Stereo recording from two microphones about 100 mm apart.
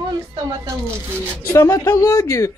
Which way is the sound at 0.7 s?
25° right (ahead or behind).